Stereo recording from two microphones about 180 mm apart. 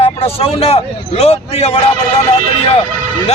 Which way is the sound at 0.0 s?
35° left (ahead or behind).